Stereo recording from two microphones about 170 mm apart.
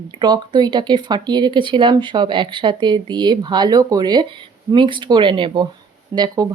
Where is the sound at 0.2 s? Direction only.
25° right (ahead or behind).